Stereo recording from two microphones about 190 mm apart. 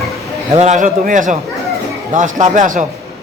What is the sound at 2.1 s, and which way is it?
Speech, 40° right (ahead or behind).